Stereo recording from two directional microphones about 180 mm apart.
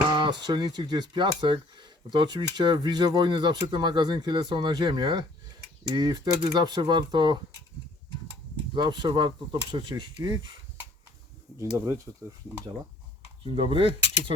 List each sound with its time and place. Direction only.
0.1 s speech: 25° right (ahead or behind)
8.7 s speech: 25° right (ahead or behind)
12.1 s speech: 15° right (ahead or behind)
13.4 s speech: 30° right (ahead or behind)